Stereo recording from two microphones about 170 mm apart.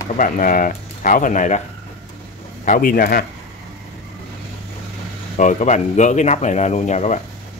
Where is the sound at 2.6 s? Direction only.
55° left (ahead or behind).